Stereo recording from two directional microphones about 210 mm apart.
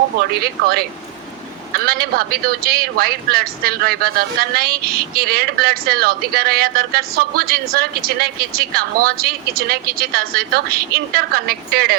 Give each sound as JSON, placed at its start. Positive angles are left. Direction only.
{"t": 0.3, "sound": "speech", "side_deg": -45}